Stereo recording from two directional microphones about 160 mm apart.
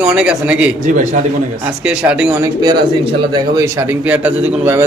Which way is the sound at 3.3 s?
20° right (ahead or behind).